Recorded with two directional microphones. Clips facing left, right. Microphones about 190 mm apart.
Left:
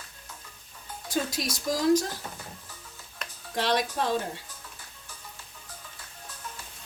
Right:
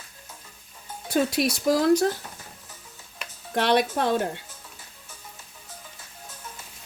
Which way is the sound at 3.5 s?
60° right (ahead or behind).